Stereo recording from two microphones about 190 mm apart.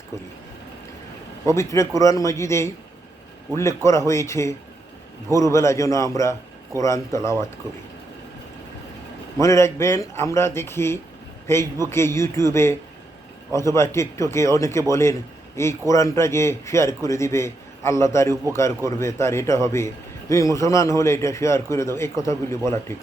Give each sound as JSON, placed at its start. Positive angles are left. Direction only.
{"t": 1.5, "sound": "a man's voice", "side_deg": 15}
{"t": 9.4, "sound": "a man's voice", "side_deg": 15}